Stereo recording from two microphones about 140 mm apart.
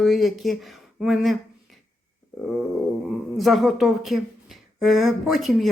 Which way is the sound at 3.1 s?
Centre (ahead or behind).